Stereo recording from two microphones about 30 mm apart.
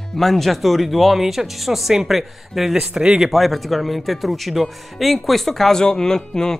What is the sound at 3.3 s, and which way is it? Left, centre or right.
A man's voice, centre.